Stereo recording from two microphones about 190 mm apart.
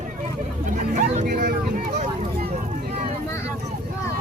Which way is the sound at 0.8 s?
40° right (ahead or behind).